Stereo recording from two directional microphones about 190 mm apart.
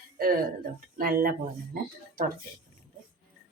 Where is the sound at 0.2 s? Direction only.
50° right (ahead or behind).